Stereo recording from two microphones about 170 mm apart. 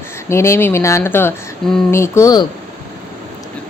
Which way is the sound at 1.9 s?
15° left (ahead or behind).